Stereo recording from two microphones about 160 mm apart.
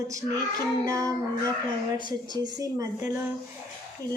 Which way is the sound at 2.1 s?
25° right (ahead or behind).